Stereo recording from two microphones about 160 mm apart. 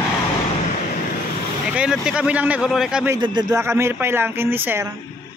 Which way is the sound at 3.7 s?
15° right (ahead or behind).